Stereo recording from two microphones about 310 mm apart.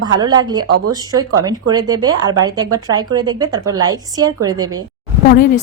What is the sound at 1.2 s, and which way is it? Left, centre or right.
Speech, right.